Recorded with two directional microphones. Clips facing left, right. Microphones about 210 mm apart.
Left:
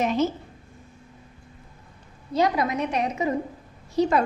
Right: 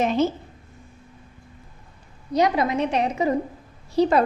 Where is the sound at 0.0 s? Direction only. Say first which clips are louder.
Right 2 dB; 30° right (ahead or behind).